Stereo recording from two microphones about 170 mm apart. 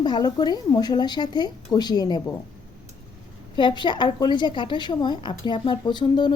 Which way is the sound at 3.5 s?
25° left (ahead or behind).